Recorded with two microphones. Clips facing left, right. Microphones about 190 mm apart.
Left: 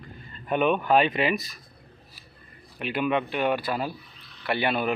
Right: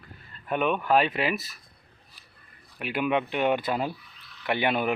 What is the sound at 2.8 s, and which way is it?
Speech, 10° right (ahead or behind).